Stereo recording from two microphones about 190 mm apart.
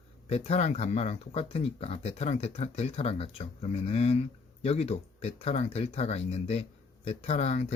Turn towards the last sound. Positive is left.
turn(degrees=35)  # may be behind; listen again after turning